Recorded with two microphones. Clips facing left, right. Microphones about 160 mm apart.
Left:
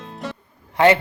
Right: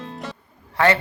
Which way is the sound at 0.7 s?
20° left (ahead or behind).